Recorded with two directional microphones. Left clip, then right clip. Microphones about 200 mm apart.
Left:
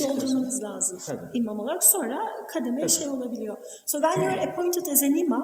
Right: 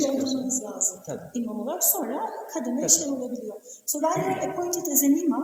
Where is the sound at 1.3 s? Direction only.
55° left (ahead or behind).